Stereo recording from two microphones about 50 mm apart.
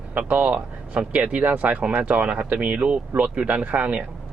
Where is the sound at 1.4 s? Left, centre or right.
Right.